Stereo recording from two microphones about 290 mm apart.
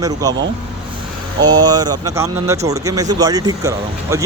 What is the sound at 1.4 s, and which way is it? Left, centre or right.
Speech, centre.